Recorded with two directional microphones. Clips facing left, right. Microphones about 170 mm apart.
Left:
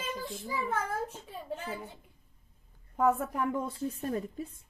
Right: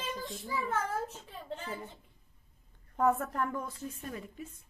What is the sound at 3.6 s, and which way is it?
Speech, 35° left (ahead or behind).